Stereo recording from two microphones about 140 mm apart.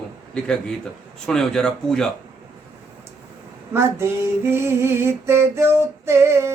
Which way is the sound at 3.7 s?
20° right (ahead or behind).